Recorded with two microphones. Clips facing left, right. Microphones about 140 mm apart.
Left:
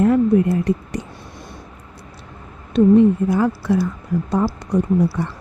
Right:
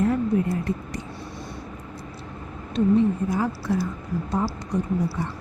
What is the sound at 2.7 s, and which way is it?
A woman's voice, 65° left (ahead or behind).